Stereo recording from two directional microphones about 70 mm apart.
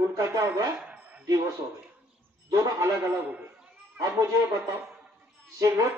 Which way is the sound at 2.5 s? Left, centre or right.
Right.